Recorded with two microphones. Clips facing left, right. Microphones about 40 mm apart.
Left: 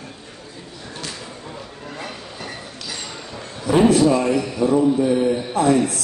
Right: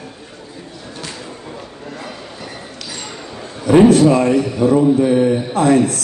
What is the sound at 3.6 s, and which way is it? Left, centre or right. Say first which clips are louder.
A man's voice: right 5 dB; right.